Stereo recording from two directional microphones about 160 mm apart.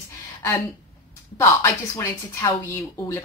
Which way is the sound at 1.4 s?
15° left (ahead or behind).